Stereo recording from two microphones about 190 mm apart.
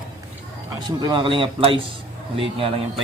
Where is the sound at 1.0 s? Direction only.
25° right (ahead or behind).